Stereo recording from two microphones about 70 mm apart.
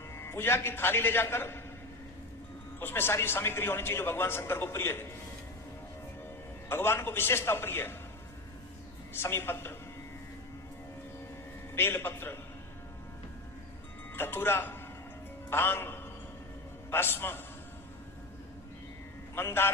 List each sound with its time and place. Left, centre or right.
0.2 s a man's voice: left
2.8 s a man's voice: left
6.7 s a man's voice: left
9.2 s a man's voice: left
11.7 s a man's voice: left
14.2 s a man's voice: left
19.4 s a man's voice: left